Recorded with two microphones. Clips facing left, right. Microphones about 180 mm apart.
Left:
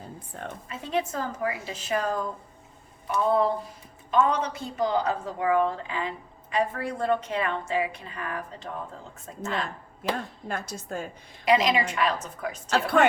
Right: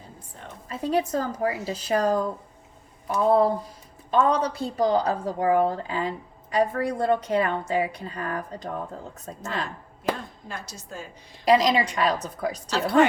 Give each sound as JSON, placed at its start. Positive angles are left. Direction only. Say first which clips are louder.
{"t": 0.3, "sound": "a sound", "louder": "left 6 dB", "side_deg": 60}
{"t": 0.7, "sound": "a woman's voice", "louder": "right 5 dB", "side_deg": -35}
{"t": 10.5, "sound": "a woman's voice", "louder": "left 6 dB", "side_deg": 55}
{"t": 11.4, "sound": "a woman's voice", "louder": "right 3 dB", "side_deg": -35}
{"t": 12.7, "sound": "a woman's voice", "louder": "right 2 dB", "side_deg": 55}